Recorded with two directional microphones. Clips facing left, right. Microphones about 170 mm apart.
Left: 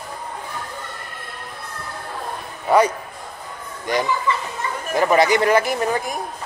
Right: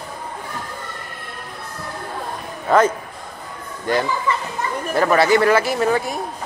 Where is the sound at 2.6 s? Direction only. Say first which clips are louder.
Right 1 dB; 10° left (ahead or behind).